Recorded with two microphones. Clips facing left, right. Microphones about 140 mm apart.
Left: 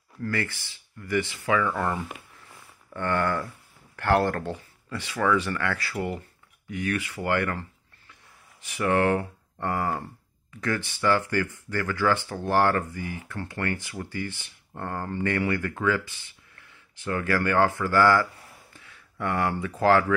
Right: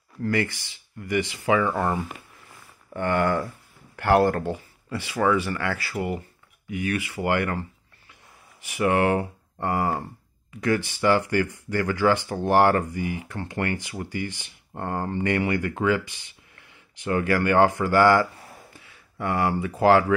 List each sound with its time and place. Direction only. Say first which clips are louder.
0.2 s speech: right 5 dB; 15° right (ahead or behind)
3.0 s speech: right 3 dB; 15° right (ahead or behind)
8.6 s speech: right 2 dB; 10° right (ahead or behind)
18.7 s speech: right 2 dB; 10° right (ahead or behind)